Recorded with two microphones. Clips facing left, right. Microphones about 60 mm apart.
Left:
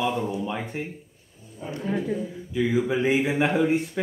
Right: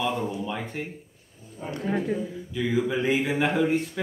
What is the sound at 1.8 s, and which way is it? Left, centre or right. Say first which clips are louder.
Speech: even; right.